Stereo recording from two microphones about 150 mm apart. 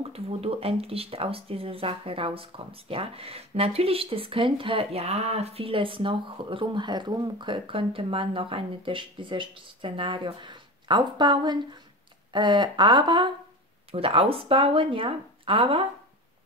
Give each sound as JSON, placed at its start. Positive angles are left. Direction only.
{"t": 0.0, "sound": "speech", "side_deg": -40}